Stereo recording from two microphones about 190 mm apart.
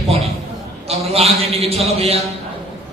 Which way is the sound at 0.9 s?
35° right (ahead or behind).